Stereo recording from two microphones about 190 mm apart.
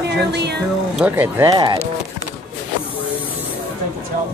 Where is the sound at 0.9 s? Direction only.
10° right (ahead or behind).